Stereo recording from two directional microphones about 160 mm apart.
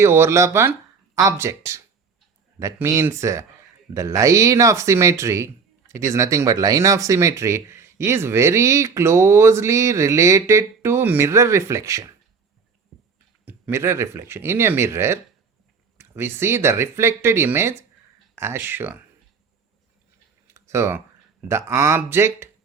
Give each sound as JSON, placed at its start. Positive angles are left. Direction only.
{"t": 0.0, "sound": "speech", "side_deg": -15}
{"t": 12.9, "sound": "music", "side_deg": 0}
{"t": 13.4, "sound": "speech", "side_deg": -15}
{"t": 20.5, "sound": "a sound", "side_deg": -20}
{"t": 21.4, "sound": "speech", "side_deg": -15}